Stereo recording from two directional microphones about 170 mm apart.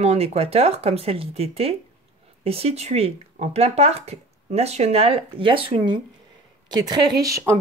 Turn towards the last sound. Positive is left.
turn(degrees=-15)  # may be behind; listen again after turning